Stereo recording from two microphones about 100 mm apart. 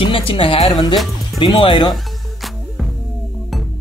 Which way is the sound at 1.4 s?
60° left (ahead or behind).